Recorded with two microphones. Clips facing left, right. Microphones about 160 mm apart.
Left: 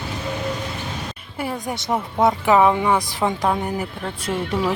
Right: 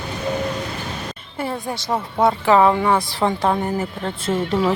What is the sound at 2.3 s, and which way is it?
Speech, 10° left (ahead or behind).